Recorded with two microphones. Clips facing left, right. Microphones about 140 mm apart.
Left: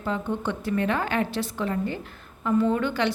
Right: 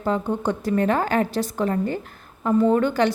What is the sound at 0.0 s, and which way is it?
A woman's voice, 40° right (ahead or behind).